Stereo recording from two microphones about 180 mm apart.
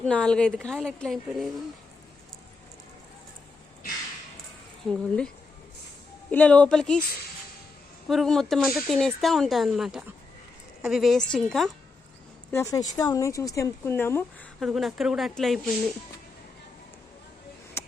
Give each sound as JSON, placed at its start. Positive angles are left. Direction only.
{"t": 0.0, "sound": "speech", "side_deg": 5}
{"t": 4.9, "sound": "speech", "side_deg": 5}
{"t": 6.3, "sound": "speech", "side_deg": 10}
{"t": 8.0, "sound": "speech", "side_deg": 0}
{"t": 12.5, "sound": "a woman's voice", "side_deg": 15}
{"t": 14.6, "sound": "speech", "side_deg": 0}
{"t": 17.8, "sound": "a sound", "side_deg": 15}